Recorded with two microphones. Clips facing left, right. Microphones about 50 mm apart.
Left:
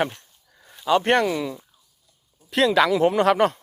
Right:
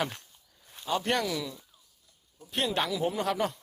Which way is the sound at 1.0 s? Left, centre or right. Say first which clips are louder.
Left 8 dB; left.